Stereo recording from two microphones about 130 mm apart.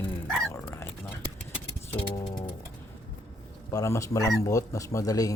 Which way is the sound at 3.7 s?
25° left (ahead or behind).